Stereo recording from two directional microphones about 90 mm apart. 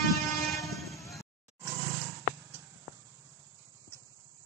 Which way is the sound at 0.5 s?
35° left (ahead or behind).